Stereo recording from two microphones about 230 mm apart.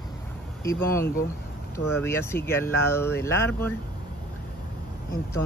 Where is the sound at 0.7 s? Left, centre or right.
Centre.